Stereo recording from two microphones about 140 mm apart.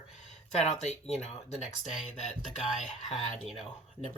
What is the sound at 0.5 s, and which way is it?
Speech, 50° left (ahead or behind).